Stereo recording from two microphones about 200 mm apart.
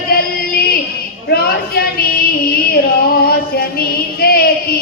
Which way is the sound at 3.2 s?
50° left (ahead or behind).